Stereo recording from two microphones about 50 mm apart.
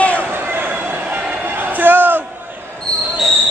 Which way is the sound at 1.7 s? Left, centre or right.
Right.